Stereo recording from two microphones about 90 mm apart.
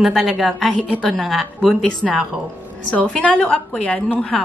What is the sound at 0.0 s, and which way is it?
A woman's voice, 5° right (ahead or behind).